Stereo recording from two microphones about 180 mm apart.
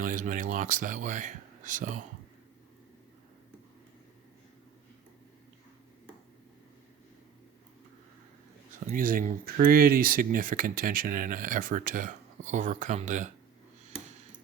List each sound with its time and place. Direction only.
0.0 s speech: 50° right (ahead or behind)
8.9 s speech: 50° right (ahead or behind)